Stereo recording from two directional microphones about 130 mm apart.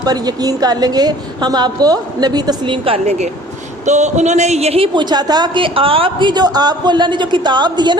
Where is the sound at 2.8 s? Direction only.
50° right (ahead or behind).